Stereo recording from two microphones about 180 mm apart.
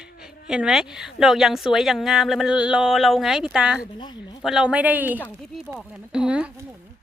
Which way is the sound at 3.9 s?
25° left (ahead or behind).